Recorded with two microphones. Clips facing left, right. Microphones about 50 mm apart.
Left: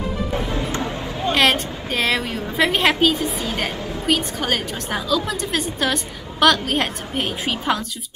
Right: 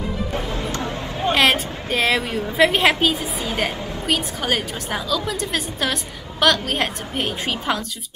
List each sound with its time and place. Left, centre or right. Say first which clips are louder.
1.3 s a woman's voice: even; centre